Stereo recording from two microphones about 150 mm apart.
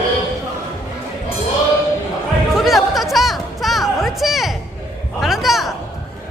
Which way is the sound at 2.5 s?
Centre (ahead or behind).